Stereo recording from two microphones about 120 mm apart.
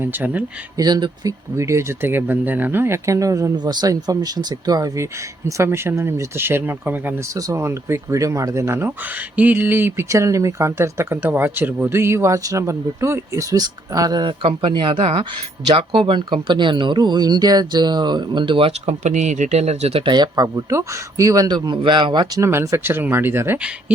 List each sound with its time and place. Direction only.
0.0 s speech: 15° right (ahead or behind)
0.8 s speech: 35° right (ahead or behind); by 7.2 s 15° right (ahead or behind)
7.3 s speech: 25° right (ahead or behind); by 18.7 s 45° right (ahead or behind)
18.9 s speech: 75° right (ahead or behind); by 20.1 s 55° right (ahead or behind)
20.1 s speech: 35° right (ahead or behind)
22.4 s speech: 25° right (ahead or behind)